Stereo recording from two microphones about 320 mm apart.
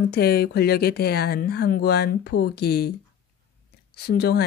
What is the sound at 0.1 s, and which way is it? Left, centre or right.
Speech, left.